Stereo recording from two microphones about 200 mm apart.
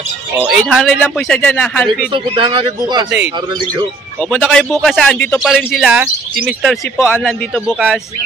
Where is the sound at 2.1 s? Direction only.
25° right (ahead or behind).